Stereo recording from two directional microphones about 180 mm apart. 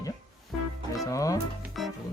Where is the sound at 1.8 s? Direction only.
Centre (ahead or behind).